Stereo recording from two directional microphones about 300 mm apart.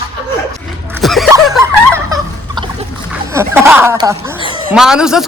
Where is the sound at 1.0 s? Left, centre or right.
Centre.